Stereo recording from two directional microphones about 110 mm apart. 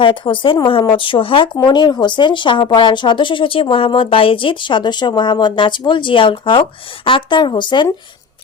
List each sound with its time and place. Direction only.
0.0 s speech: 50° left (ahead or behind)